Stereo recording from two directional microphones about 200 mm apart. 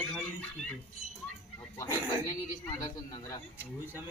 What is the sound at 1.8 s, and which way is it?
A man's voice, 15° left (ahead or behind).